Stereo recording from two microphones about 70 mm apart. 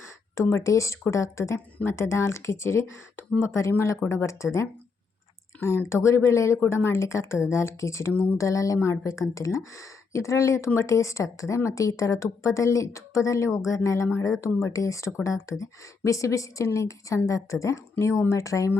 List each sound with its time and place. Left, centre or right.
0.5 s speech: left
5.5 s speech: left